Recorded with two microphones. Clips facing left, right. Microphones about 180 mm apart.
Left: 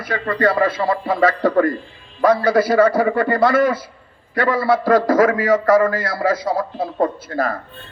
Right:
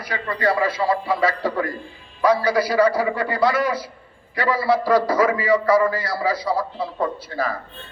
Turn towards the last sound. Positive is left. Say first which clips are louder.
# left 3 dB
turn(degrees=50)  # may be behind; listen again after turning